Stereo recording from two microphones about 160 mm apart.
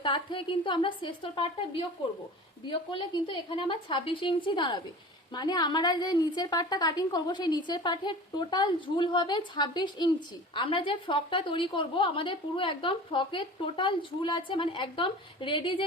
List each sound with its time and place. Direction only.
0.0 s a woman's voice: 30° left (ahead or behind)